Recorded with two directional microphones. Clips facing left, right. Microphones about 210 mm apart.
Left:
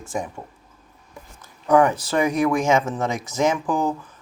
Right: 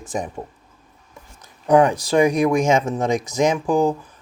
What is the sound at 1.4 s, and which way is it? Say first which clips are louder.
Speech: right 2 dB; 15° right (ahead or behind).